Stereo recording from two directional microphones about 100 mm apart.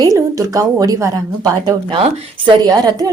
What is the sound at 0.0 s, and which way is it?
A woman's voice, 35° right (ahead or behind).